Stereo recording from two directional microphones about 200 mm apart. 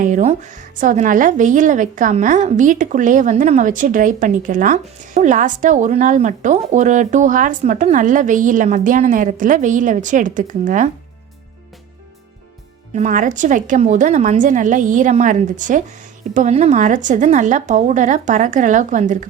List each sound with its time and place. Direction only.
0.0 s a woman's voice: 35° right (ahead or behind)
12.9 s a woman's voice: 35° right (ahead or behind)